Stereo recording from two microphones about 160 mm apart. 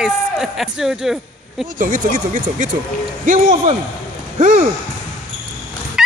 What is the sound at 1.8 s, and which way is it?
Speech, 55° right (ahead or behind).